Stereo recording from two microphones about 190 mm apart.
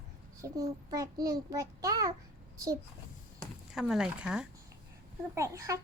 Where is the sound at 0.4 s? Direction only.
20° right (ahead or behind).